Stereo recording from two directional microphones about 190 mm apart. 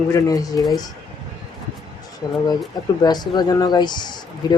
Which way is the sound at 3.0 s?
20° left (ahead or behind).